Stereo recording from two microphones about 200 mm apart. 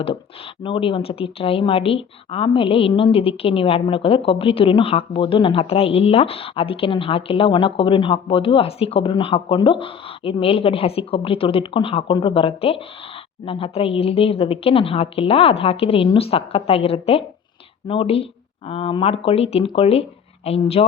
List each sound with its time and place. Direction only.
0.6 s a woman's voice: 25° left (ahead or behind)